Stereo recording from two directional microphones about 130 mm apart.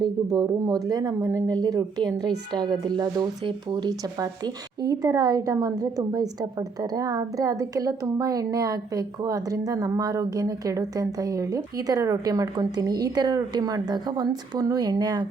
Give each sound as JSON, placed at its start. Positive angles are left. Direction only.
{"t": 0.0, "sound": "speech", "side_deg": -30}